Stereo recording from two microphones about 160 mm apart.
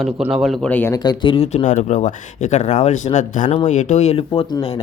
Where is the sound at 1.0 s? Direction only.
30° left (ahead or behind).